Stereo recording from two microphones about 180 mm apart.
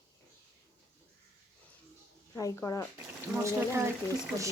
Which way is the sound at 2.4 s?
20° left (ahead or behind).